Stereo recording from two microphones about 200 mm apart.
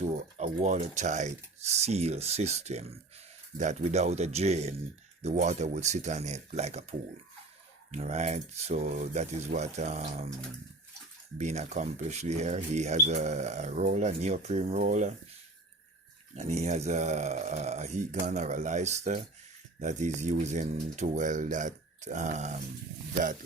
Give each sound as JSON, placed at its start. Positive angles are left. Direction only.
{"t": 0.3, "sound": "speech", "side_deg": -35}
{"t": 7.9, "sound": "speech", "side_deg": -35}
{"t": 11.3, "sound": "speech", "side_deg": -35}
{"t": 16.3, "sound": "speech", "side_deg": -35}